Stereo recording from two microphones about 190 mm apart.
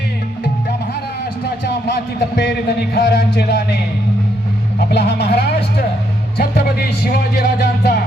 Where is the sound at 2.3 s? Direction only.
60° left (ahead or behind).